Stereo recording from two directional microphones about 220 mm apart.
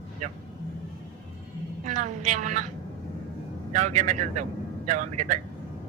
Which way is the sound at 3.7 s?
35° right (ahead or behind).